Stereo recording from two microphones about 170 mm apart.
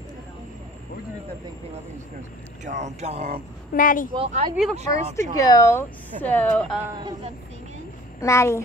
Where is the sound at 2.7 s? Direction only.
45° right (ahead or behind).